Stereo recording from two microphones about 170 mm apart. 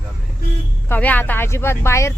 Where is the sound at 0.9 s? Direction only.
10° left (ahead or behind).